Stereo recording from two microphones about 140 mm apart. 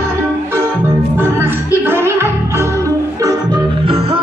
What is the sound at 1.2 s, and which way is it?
Music, 15° right (ahead or behind).